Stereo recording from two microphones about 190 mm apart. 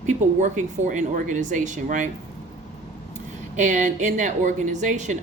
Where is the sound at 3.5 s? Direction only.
40° right (ahead or behind).